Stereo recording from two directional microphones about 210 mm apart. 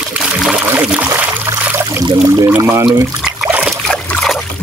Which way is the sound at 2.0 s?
20° right (ahead or behind).